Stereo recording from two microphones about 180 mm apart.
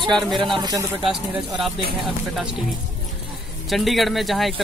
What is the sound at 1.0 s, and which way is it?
Speech, centre (ahead or behind).